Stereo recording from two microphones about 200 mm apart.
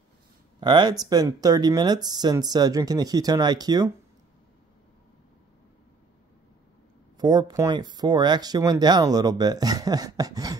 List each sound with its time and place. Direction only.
0.6 s speech: 20° right (ahead or behind)
7.2 s speech: 20° right (ahead or behind)